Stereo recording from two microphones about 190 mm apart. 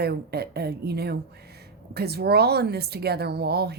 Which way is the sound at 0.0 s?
55° right (ahead or behind).